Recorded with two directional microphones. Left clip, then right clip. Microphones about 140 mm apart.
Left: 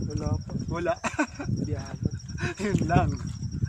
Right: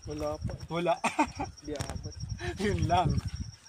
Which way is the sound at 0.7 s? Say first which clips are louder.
Even; 10° left (ahead or behind).